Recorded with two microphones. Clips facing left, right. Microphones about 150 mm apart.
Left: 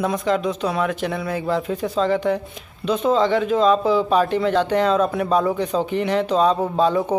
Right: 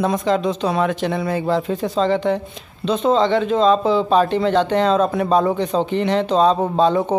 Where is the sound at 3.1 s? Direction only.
5° left (ahead or behind).